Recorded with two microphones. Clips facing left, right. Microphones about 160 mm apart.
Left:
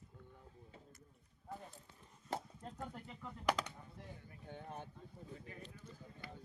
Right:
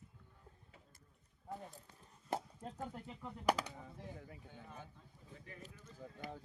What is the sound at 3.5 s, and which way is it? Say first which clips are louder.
Speech: right 2 dB; 10° right (ahead or behind).